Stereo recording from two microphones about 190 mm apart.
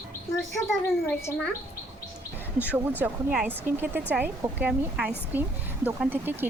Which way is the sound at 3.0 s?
10° right (ahead or behind).